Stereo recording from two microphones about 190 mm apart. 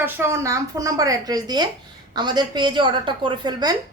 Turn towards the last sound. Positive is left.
turn(degrees=-25)  # may be behind; listen again after turning